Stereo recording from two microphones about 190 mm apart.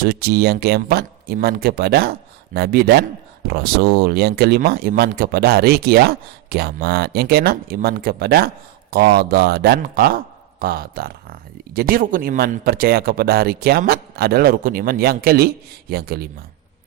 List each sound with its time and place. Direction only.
0.0 s speech: 55° right (ahead or behind)